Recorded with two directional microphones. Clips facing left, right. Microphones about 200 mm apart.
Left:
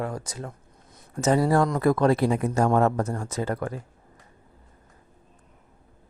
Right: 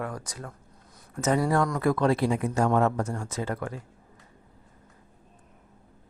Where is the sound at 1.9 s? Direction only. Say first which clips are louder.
Left 2 dB; 45° left (ahead or behind).